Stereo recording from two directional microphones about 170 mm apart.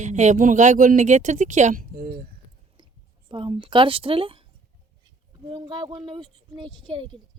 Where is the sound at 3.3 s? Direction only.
30° right (ahead or behind).